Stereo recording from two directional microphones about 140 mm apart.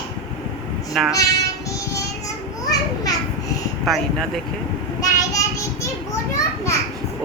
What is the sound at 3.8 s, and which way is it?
Speech, centre (ahead or behind).